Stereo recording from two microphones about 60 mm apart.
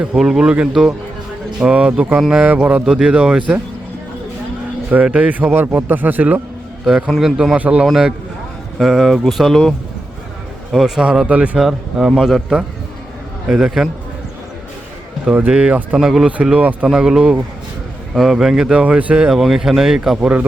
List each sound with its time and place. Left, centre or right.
0.2 s speech: centre
5.0 s speech: centre
5.3 s a man's voice: right
7.2 s speech: centre
7.6 s speech: right
7.9 s a man's voice: centre
10.7 s speech: centre
11.3 s speech: right
11.5 s a man's voice: centre
15.3 s speech: right
16.0 s speech: centre
16.6 s speech: right
16.9 s speech: centre
19.3 s speech: centre